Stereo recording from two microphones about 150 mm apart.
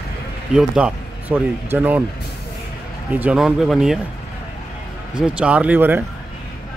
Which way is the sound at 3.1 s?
5° right (ahead or behind).